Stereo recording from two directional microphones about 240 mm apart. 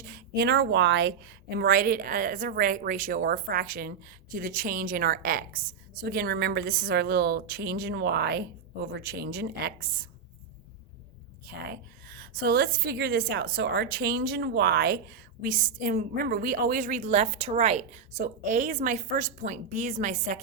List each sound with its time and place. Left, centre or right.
0.0 s a woman's voice: right
11.4 s a woman's voice: right